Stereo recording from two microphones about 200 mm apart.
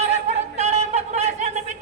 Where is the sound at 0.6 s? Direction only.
35° right (ahead or behind).